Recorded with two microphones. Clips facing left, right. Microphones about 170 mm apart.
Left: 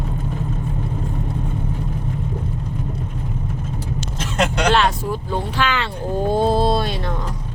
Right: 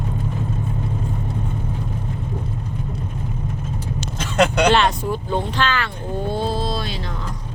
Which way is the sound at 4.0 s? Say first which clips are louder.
Right 4 dB; 60° right (ahead or behind).